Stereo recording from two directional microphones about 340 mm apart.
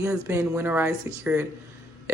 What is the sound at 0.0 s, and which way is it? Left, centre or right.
Speech, centre.